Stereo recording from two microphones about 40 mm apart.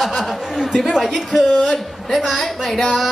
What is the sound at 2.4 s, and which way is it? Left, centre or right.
Speech, centre.